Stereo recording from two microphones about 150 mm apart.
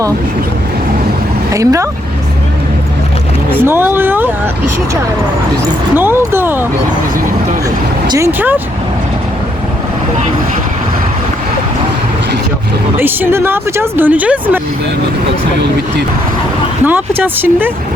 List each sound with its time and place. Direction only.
1.5 s speech: 20° right (ahead or behind)
3.5 s speech: 15° right (ahead or behind)
6.0 s speech: 15° right (ahead or behind)
8.0 s speech: 25° right (ahead or behind)
8.3 s speech: 10° right (ahead or behind)
13.0 s speech: 15° right (ahead or behind)
16.8 s speech: 15° right (ahead or behind)